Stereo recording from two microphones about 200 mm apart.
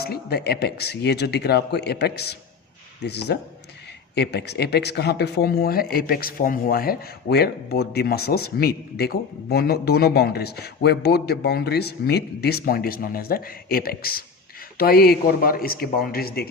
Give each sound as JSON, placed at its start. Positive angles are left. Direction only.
{"t": 0.0, "sound": "speech", "side_deg": 55}